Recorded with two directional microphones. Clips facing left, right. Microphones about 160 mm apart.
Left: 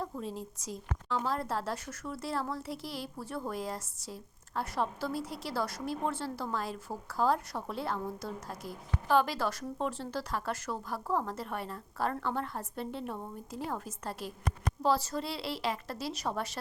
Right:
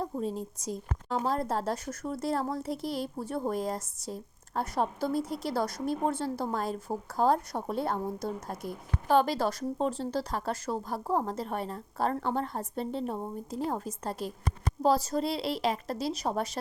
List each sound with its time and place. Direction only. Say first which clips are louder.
0.0 s a woman's voice: right 5 dB; 40° right (ahead or behind)